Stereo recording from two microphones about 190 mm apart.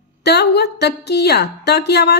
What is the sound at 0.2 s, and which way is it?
A woman's voice, 60° left (ahead or behind).